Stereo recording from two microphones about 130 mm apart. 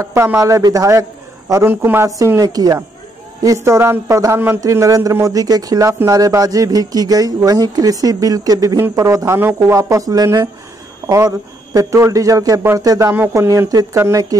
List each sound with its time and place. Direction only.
0.0 s speech: 20° right (ahead or behind)